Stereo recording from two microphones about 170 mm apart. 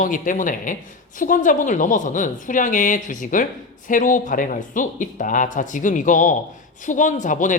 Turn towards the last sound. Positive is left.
turn(degrees=50)  # may be behind; listen again after turning